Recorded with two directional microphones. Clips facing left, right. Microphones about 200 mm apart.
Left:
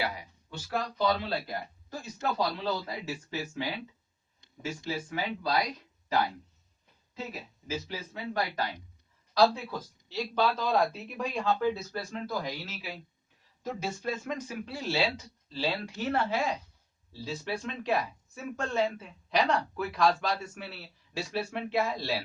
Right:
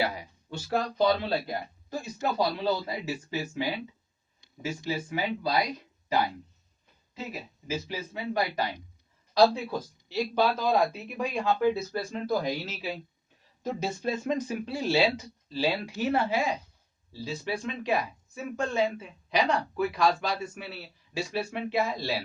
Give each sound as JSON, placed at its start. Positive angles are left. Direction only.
{"t": 0.0, "sound": "speech", "side_deg": -25}
{"t": 7.7, "sound": "speech", "side_deg": -10}